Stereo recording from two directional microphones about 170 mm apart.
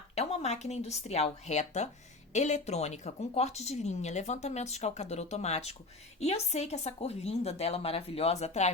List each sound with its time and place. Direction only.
0.2 s a woman's voice: 40° left (ahead or behind)